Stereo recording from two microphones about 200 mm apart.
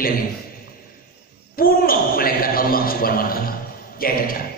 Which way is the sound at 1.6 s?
45° left (ahead or behind).